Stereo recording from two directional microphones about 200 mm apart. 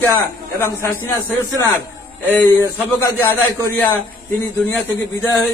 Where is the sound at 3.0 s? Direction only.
10° left (ahead or behind).